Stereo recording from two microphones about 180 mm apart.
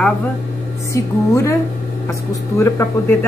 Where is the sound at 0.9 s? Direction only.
15° left (ahead or behind).